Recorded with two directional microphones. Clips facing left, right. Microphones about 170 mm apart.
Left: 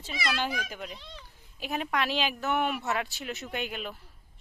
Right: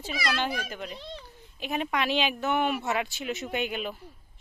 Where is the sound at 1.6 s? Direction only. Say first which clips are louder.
Right 1 dB; centre (ahead or behind).